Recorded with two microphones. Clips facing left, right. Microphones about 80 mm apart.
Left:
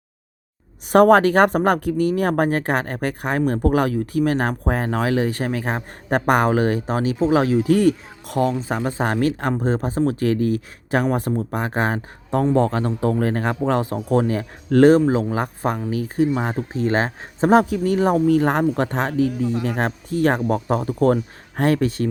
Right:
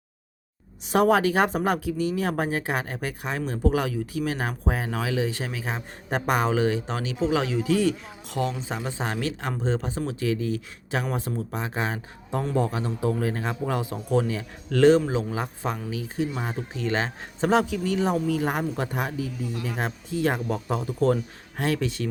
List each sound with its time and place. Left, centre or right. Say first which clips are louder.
0.9 s speech: left 7 dB; left
11.3 s speech: left 7 dB; left
12.5 s speech: left 7 dB; left
14.2 s speech: left 4 dB; left
16.7 s speech: left 6 dB; left